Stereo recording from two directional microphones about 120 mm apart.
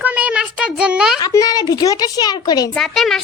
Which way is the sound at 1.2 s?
30° left (ahead or behind).